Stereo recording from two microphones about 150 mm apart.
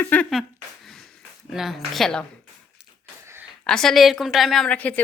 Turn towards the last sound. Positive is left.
turn(degrees=10)  # may be behind; listen again after turning